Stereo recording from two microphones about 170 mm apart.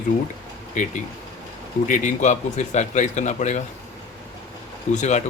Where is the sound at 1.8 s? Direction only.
45° left (ahead or behind).